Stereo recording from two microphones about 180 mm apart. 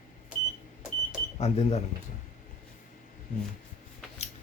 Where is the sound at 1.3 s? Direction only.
35° left (ahead or behind).